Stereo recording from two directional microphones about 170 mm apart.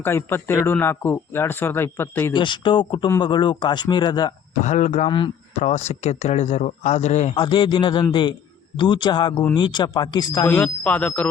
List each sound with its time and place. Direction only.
0.0 s speech: 15° left (ahead or behind)
2.3 s speech: 30° left (ahead or behind)
4.6 s speech: 45° left (ahead or behind)
5.0 s speech: 30° left (ahead or behind)
5.6 s speech: 45° left (ahead or behind)
7.3 s speech: 30° left (ahead or behind)
10.4 s speech: 10° left (ahead or behind)